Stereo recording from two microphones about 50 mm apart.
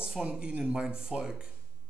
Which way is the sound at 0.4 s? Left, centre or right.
Centre.